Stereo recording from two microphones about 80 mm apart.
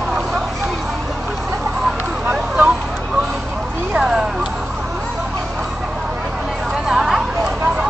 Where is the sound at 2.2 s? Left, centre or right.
Centre.